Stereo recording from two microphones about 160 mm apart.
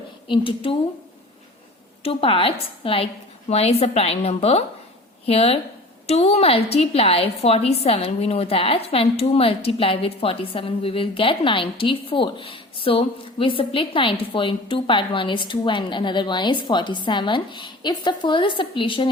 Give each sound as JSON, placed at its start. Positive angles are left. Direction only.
{"t": 0.3, "sound": "a woman's voice", "side_deg": 35}
{"t": 2.0, "sound": "a woman's voice", "side_deg": 35}